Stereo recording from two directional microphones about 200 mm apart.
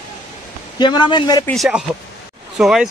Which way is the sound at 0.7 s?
20° left (ahead or behind).